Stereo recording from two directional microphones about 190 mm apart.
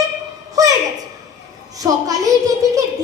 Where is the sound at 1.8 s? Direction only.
20° right (ahead or behind).